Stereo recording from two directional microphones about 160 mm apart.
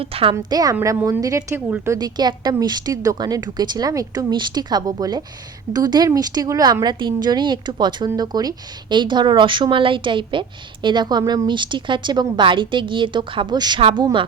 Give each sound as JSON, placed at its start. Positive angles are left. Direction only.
{"t": 0.0, "sound": "a woman's voice", "side_deg": -35}
{"t": 0.3, "sound": "a woman's voice", "side_deg": -20}